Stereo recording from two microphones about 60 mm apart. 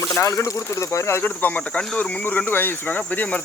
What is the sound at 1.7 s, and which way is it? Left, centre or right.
Speech, centre.